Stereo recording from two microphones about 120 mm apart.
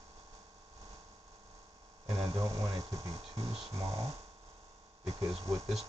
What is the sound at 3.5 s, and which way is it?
Speech, 55° right (ahead or behind).